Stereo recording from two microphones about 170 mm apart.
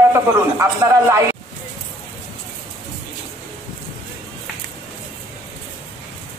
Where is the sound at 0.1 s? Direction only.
15° right (ahead or behind).